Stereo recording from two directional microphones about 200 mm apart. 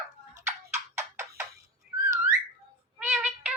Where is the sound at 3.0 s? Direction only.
5° right (ahead or behind).